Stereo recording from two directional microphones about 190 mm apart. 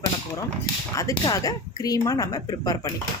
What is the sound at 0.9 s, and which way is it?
A woman's voice, 20° left (ahead or behind).